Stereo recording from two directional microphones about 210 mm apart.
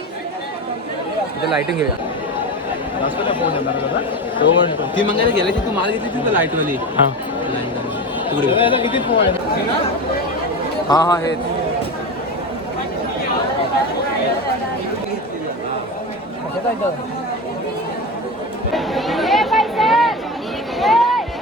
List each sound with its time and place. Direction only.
3.0 s speech: 25° left (ahead or behind)
6.3 s speech: 10° right (ahead or behind)
8.3 s speech: 25° left (ahead or behind)
10.8 s speech: 20° left (ahead or behind)
18.7 s chatter: centre (ahead or behind)
20.8 s a sound: centre (ahead or behind)